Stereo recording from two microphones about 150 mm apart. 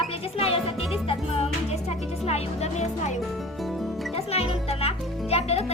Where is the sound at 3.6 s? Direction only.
Centre (ahead or behind).